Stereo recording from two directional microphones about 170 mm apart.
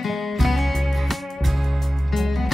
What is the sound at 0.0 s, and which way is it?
Music, centre (ahead or behind).